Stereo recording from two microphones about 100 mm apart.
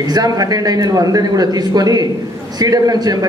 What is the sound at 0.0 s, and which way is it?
A man's voice, 40° right (ahead or behind).